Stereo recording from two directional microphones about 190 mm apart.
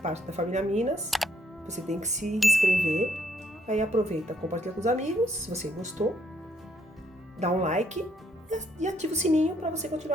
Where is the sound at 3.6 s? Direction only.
35° right (ahead or behind).